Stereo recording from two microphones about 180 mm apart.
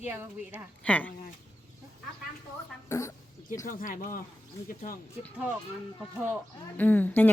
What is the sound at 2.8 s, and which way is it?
Speech, 15° left (ahead or behind).